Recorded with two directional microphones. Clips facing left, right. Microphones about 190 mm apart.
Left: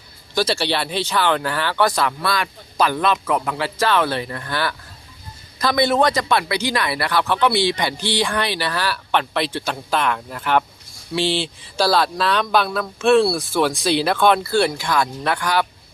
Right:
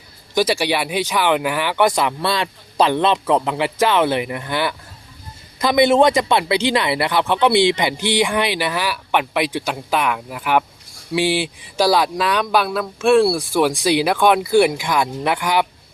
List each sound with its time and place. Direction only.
0.3 s speech: 15° right (ahead or behind)